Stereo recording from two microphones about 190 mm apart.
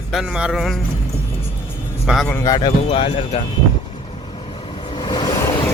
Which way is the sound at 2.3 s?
20° left (ahead or behind).